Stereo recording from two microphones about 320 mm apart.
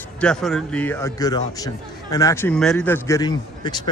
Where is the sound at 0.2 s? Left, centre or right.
Centre.